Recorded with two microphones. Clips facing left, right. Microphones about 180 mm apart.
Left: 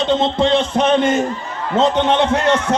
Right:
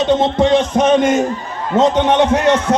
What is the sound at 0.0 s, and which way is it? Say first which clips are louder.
A man's voice: right 3 dB; 15° right (ahead or behind).